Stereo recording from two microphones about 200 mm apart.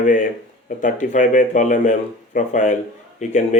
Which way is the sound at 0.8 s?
40° left (ahead or behind).